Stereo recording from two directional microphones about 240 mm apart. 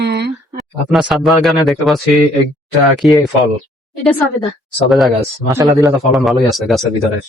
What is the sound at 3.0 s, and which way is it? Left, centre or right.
Speech, centre.